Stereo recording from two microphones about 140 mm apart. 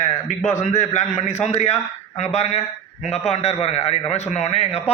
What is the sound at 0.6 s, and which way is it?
A man's voice, 55° left (ahead or behind).